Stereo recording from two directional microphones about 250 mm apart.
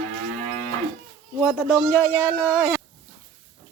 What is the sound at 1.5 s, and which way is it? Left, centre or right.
Speech, centre.